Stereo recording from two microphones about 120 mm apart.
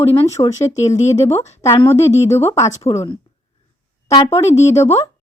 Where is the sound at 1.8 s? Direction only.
25° left (ahead or behind).